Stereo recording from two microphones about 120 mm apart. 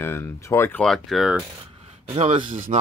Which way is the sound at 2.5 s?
90° right.